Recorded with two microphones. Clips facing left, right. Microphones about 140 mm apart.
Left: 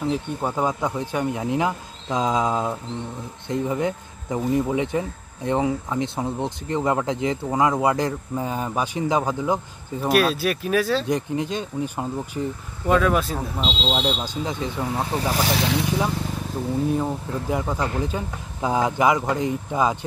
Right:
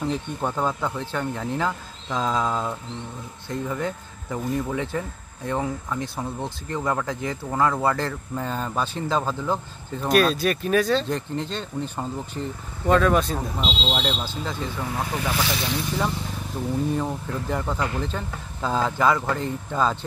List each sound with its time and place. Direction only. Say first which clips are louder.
0.0 s speech: left 2 dB; 5° left (ahead or behind)
10.0 s speech: even; 5° left (ahead or behind); by 15.5 s 35° left (ahead or behind)
16.9 s speech: left 2 dB; 10° left (ahead or behind)